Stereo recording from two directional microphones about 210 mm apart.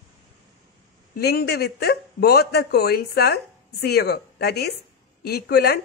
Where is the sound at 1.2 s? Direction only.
50° left (ahead or behind).